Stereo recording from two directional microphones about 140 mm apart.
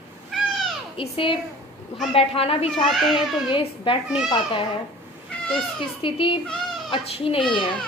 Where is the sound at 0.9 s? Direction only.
40° left (ahead or behind).